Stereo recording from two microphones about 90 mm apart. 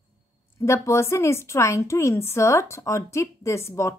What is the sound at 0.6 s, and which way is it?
A woman's voice, 30° left (ahead or behind).